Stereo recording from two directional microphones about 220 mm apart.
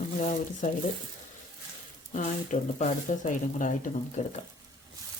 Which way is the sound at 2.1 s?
35° left (ahead or behind).